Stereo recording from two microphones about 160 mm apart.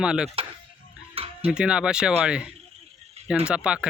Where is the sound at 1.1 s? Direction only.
35° right (ahead or behind).